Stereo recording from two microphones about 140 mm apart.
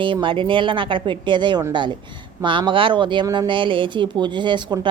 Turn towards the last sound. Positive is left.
turn(degrees=-30)  # may be behind; listen again after turning